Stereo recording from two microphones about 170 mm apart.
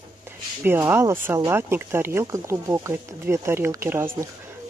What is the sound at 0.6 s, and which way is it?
Speech, 15° right (ahead or behind).